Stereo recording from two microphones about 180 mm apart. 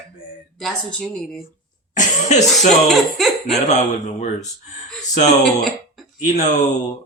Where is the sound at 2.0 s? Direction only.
40° left (ahead or behind).